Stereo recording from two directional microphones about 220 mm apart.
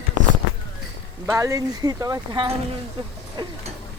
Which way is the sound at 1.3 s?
15° right (ahead or behind).